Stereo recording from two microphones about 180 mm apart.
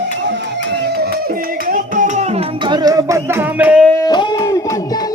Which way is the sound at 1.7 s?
45° right (ahead or behind).